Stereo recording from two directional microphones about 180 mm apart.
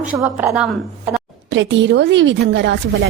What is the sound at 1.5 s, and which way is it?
A woman's voice, 90° right.